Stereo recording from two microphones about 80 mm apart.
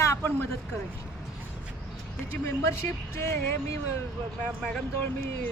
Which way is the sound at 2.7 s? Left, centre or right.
Left.